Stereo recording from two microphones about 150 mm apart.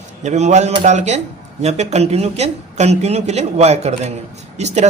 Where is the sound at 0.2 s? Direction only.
50° right (ahead or behind).